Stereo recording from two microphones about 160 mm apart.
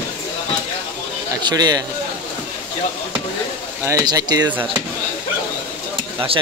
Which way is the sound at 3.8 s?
20° right (ahead or behind).